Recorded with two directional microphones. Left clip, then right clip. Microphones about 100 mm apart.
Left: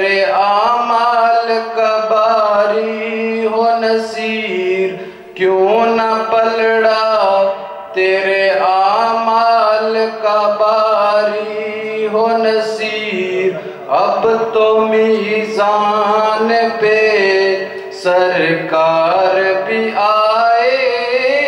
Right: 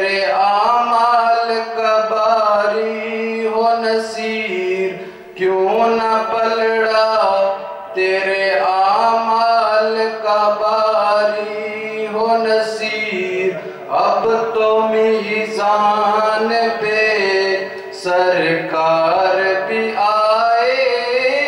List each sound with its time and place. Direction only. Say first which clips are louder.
0.0 s mantra: left 3 dB; 10° left (ahead or behind)
5.8 s a sound: left 2 dB; 10° left (ahead or behind)
8.0 s mantra: left 4 dB; 10° left (ahead or behind)
13.9 s mantra: left 2 dB; 10° left (ahead or behind)
15.6 s chant: left 1 dB; 10° left (ahead or behind)
18.0 s a sound: left 2 dB; 10° left (ahead or behind)
19.3 s mantra: left 2 dB; 10° left (ahead or behind)